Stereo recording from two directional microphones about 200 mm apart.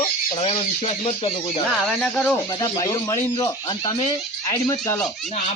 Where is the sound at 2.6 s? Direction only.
15° left (ahead or behind).